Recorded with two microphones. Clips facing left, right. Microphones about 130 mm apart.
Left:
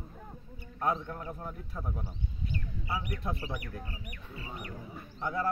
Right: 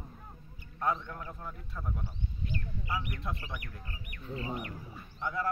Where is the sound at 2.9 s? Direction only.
35° left (ahead or behind).